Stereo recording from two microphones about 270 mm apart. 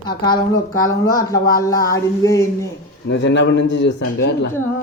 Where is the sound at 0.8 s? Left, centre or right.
Centre.